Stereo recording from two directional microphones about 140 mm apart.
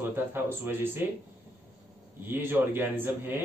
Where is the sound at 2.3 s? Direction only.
15° right (ahead or behind).